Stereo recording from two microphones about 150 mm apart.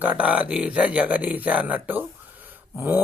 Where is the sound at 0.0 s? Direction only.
10° right (ahead or behind).